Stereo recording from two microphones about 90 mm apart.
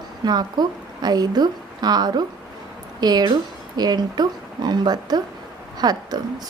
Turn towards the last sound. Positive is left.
turn(degrees=-50)  # may be behind; listen again after turning